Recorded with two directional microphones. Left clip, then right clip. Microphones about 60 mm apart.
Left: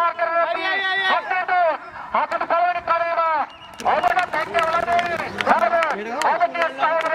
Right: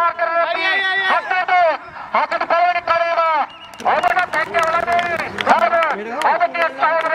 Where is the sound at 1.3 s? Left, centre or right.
Right.